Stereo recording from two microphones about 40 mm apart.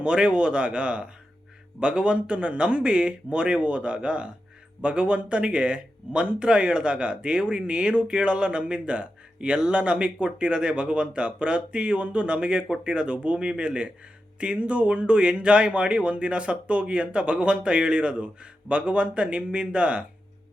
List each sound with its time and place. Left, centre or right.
0.0 s speech: right